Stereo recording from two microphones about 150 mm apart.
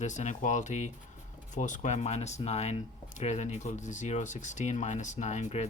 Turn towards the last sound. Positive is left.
turn(degrees=50)  # may be behind; listen again after turning